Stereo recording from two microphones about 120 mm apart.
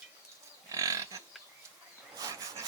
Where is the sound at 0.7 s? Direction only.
25° right (ahead or behind).